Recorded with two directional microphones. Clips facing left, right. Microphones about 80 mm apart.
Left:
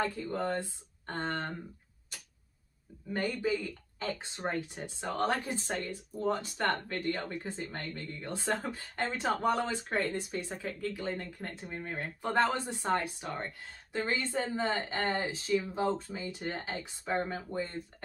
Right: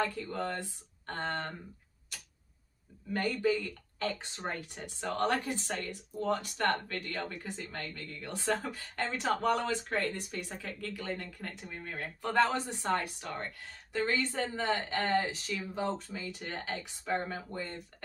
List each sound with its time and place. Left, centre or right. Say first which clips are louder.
0.0 s speech: left 1 dB; centre
3.1 s speech: right 1 dB; centre